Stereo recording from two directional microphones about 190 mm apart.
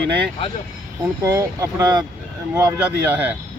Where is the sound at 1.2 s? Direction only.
15° right (ahead or behind).